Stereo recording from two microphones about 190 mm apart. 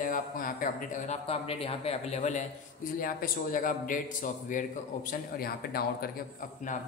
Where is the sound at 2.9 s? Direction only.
50° left (ahead or behind).